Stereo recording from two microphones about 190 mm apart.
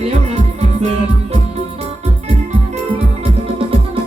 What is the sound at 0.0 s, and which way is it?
Music, 35° right (ahead or behind).